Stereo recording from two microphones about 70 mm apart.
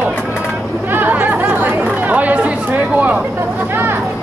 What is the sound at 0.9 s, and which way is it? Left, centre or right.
Chatter, right.